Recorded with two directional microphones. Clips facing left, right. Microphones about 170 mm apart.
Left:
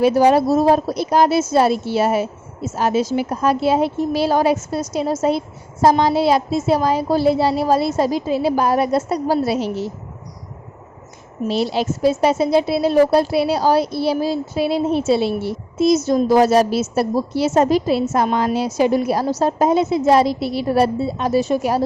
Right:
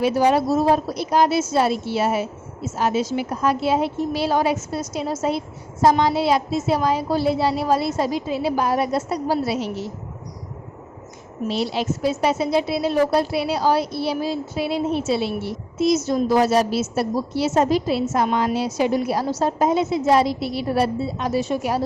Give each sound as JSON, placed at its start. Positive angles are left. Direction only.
{"t": 0.0, "sound": "a woman's voice", "side_deg": 40}
{"t": 11.4, "sound": "a woman's voice", "side_deg": 35}